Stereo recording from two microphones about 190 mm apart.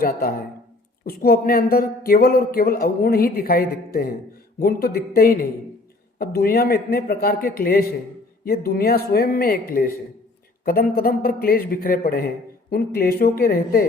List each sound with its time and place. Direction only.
0.0 s speech: 50° left (ahead or behind)